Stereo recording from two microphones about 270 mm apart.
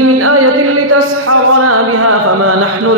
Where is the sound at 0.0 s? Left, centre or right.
Right.